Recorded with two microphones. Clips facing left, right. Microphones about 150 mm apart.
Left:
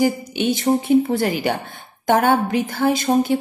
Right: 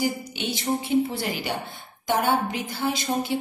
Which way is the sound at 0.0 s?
50° left (ahead or behind).